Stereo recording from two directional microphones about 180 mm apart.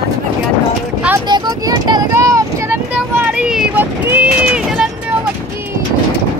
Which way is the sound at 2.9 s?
5° right (ahead or behind).